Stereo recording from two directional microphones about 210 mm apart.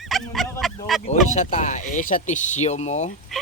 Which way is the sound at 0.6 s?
Centre (ahead or behind).